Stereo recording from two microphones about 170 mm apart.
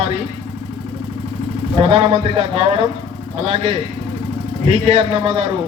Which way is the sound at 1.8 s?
35° right (ahead or behind).